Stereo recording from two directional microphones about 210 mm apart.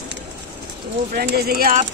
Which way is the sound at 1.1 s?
50° right (ahead or behind).